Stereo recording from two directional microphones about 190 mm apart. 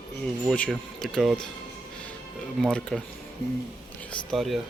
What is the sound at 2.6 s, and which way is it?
Speech, 5° left (ahead or behind).